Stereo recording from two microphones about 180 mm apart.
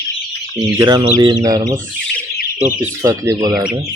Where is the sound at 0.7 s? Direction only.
20° right (ahead or behind).